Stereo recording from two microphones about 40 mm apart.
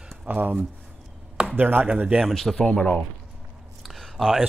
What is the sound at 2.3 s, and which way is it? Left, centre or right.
Speech, centre.